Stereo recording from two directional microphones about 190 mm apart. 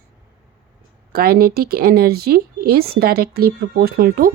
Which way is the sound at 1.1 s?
55° right (ahead or behind).